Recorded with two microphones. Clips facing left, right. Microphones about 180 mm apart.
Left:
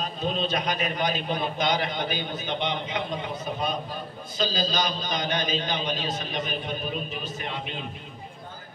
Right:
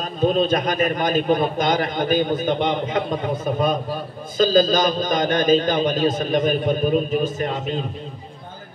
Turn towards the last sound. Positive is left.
turn(degrees=-45)  # may be behind; listen again after turning